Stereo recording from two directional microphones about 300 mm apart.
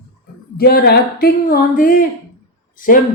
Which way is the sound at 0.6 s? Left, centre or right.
Left.